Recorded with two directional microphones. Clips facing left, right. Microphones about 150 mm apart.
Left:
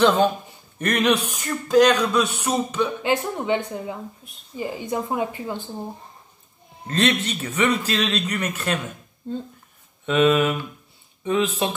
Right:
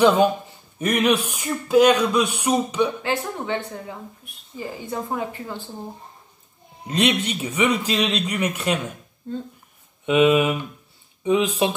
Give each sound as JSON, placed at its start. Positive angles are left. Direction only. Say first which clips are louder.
{"t": 0.0, "sound": "speech", "louder": "right 1 dB", "side_deg": -10}
{"t": 3.0, "sound": "speech", "louder": "left 3 dB", "side_deg": 15}
{"t": 6.9, "sound": "speech", "louder": "right 1 dB", "side_deg": -15}
{"t": 10.0, "sound": "speech", "louder": "right 1 dB", "side_deg": -10}